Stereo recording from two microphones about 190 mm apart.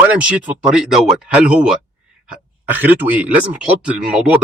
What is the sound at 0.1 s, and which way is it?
Speech, 5° right (ahead or behind).